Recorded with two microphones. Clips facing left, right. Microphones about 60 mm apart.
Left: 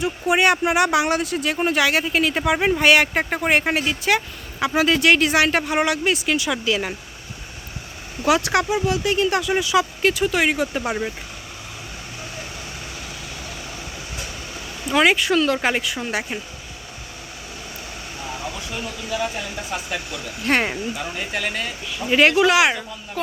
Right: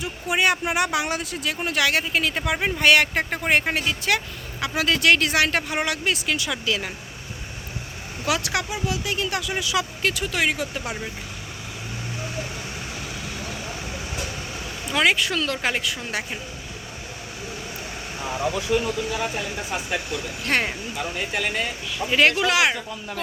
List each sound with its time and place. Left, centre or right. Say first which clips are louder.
0.0 s speech: left 4 dB; left
1.6 s speech: left 3 dB; left
8.2 s speech: left 6 dB; left
14.9 s speech: left 4 dB; left
18.7 s speech: right 11 dB; right
19.7 s speech: left 1 dB; centre
20.5 s speech: left 3 dB; centre
20.9 s speech: even; centre
22.1 s speech: left 4 dB; centre